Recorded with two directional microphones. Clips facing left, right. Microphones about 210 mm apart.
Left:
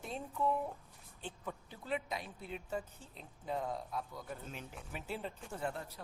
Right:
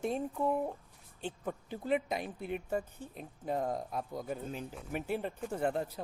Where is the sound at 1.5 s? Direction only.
55° right (ahead or behind).